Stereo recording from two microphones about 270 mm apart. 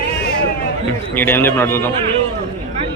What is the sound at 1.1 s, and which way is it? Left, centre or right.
Speech, centre.